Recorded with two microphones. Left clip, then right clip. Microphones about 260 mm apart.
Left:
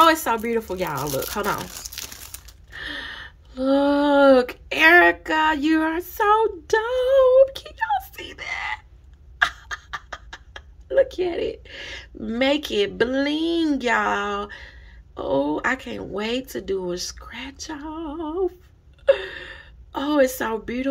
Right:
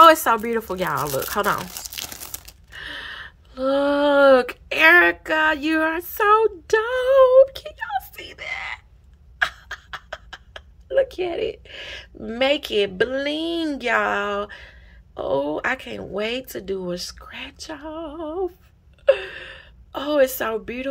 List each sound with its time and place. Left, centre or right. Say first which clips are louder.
0.0 s speech: right 4 dB; centre
1.8 s crumpling: right 2 dB; right
2.7 s a woman's voice: left 1 dB; centre